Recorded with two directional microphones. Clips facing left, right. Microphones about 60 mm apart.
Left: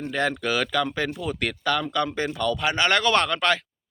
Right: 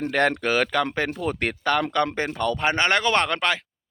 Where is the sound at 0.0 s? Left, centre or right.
Right.